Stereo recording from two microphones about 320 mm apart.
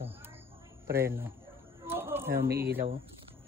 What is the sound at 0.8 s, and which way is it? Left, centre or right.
Speech, centre.